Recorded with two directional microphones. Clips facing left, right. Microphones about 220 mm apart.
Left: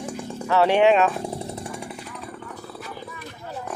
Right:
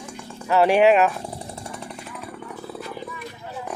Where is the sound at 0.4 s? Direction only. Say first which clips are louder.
Right 1 dB; 10° right (ahead or behind).